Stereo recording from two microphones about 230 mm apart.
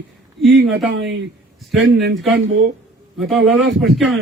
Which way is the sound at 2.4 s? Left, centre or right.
Right.